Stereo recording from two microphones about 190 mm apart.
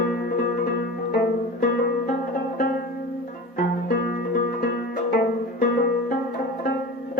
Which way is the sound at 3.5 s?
50° left (ahead or behind).